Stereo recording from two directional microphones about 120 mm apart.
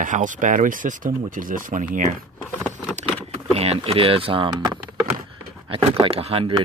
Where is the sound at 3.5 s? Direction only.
55° right (ahead or behind).